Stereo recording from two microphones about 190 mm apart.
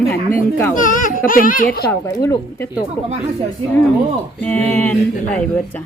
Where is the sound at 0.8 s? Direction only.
45° left (ahead or behind).